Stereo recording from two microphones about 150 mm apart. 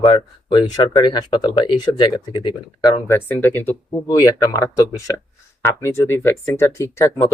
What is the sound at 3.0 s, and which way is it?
Speech, 15° left (ahead or behind).